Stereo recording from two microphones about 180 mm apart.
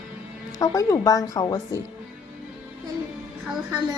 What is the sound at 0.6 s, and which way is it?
Speech, 20° left (ahead or behind).